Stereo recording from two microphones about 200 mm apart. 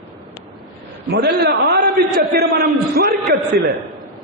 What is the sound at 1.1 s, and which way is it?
A man's voice, 55° right (ahead or behind).